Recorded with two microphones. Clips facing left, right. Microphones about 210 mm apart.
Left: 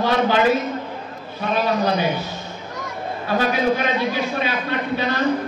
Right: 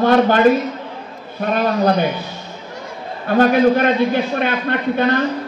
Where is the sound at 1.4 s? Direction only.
55° right (ahead or behind).